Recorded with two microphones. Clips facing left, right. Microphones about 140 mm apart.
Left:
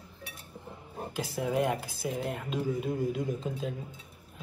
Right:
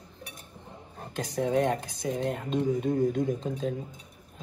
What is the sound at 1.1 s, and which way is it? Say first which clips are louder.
Speech: right 4 dB; 5° left (ahead or behind).